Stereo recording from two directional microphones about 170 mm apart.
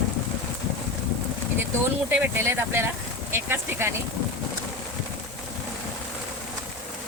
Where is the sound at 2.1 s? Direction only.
10° right (ahead or behind).